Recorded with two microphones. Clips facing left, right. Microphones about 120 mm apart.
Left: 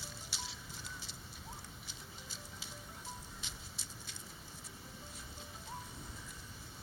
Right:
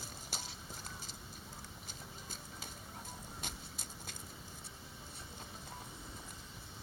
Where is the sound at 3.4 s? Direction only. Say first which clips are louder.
Right 4 dB; 50° right (ahead or behind).